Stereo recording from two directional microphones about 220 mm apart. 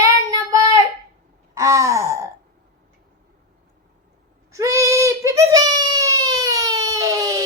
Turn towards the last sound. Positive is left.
turn(degrees=-15)  # may be behind; listen again after turning